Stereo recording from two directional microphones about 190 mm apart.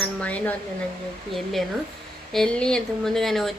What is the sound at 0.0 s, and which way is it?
Speech, 5° left (ahead or behind).